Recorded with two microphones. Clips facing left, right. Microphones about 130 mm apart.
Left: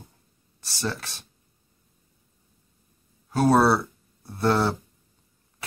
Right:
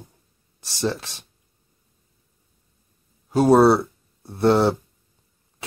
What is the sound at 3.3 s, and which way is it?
Speech, 20° right (ahead or behind).